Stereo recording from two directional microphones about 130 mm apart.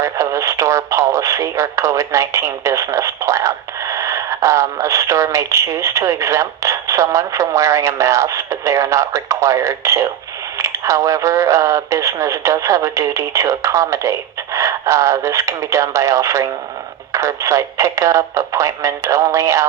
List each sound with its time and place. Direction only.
0.0 s speech: 25° right (ahead or behind)